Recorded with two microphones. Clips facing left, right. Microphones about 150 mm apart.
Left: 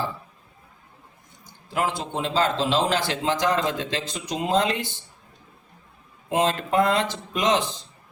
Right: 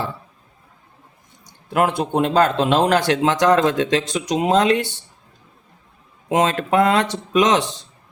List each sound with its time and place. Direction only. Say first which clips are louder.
1.7 s speech: right 7 dB; 60° right (ahead or behind)
6.2 s speech: right 4 dB; 70° right (ahead or behind)